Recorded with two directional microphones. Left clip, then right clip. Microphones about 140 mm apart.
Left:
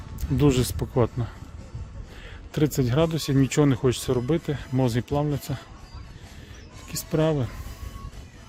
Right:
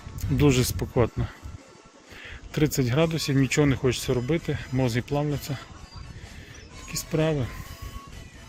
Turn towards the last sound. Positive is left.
turn(degrees=40)  # may be behind; listen again after turning